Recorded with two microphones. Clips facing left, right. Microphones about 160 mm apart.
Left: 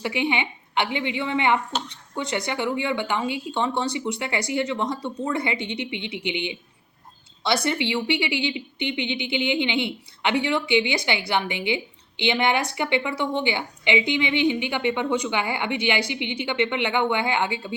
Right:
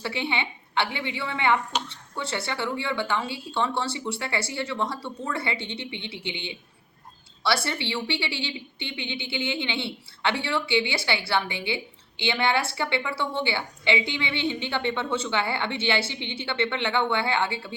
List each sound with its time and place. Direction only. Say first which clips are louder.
0.0 s a woman's voice: left 4 dB; 15° left (ahead or behind)